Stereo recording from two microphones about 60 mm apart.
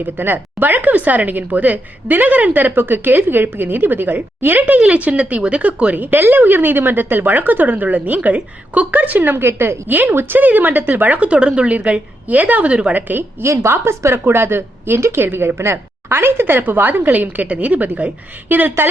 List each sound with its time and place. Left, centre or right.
0.0 s speech: right
9.4 s a woman's voice: right; by 12.9 s centre
12.9 s speech: right
13.4 s a woman's voice: right